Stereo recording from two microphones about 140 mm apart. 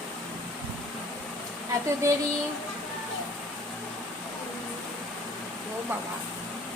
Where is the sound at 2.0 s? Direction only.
20° right (ahead or behind).